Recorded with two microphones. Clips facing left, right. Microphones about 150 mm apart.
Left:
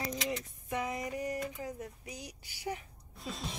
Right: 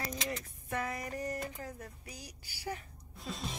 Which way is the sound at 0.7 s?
15° left (ahead or behind).